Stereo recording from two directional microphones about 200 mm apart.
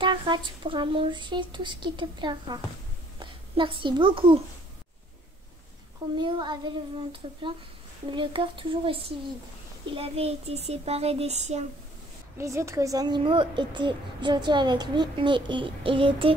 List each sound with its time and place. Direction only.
0.0 s a woman's voice: 25° right (ahead or behind)
6.1 s a woman's voice: 25° right (ahead or behind)
12.4 s a woman's voice: 15° right (ahead or behind)